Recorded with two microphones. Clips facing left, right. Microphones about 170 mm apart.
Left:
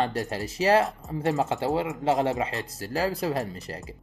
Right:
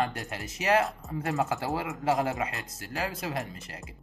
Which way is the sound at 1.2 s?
20° left (ahead or behind).